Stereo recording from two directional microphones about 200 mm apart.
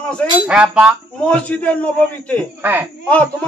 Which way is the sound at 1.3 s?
5° left (ahead or behind).